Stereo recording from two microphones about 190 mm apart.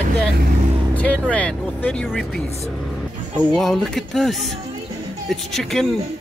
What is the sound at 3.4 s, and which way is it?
Speech, 5° left (ahead or behind).